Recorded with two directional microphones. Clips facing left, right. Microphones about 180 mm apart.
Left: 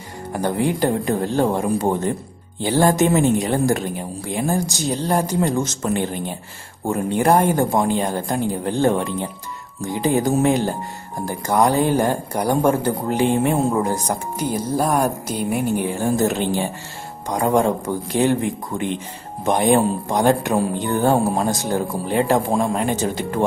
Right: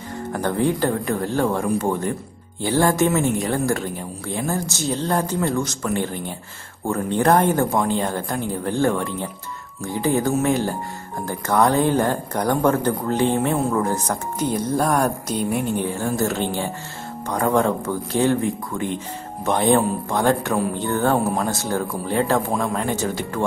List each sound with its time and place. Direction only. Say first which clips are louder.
0.3 s speech: even; 10° left (ahead or behind)